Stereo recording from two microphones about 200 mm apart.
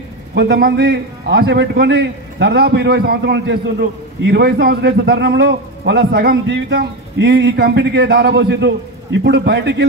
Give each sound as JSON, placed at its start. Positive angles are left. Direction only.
{"t": 0.3, "sound": "a man's voice", "side_deg": -55}